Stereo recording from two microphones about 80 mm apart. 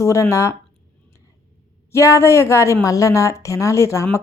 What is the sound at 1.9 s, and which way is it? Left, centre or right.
Speech, left.